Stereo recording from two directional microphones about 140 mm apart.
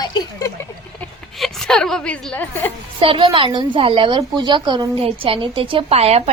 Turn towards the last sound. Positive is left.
turn(degrees=-50)  # may be behind; listen again after turning